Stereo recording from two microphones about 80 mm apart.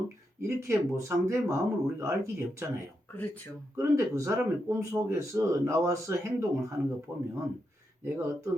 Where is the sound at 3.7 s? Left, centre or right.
Right.